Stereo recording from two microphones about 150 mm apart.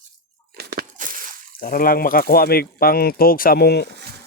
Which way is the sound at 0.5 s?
80° right.